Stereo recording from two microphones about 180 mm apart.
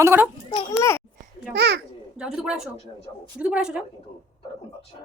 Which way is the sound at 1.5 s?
70° right (ahead or behind).